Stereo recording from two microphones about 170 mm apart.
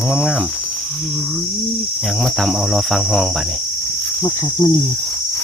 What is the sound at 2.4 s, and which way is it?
Cricket, centre (ahead or behind).